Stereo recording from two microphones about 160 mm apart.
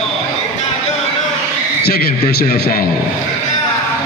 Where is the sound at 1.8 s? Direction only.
75° left (ahead or behind).